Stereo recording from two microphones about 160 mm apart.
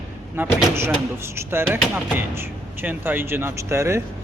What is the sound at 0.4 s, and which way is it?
A man's voice, 15° right (ahead or behind).